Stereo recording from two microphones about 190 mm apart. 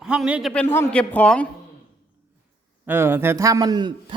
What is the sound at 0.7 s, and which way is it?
Speech, 10° left (ahead or behind).